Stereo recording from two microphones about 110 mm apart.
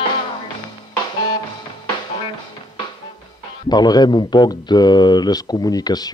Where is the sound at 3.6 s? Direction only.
40° left (ahead or behind).